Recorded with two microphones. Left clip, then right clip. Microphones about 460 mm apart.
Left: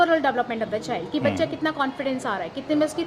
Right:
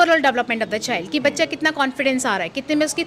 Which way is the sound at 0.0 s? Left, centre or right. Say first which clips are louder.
Right 4 dB; right.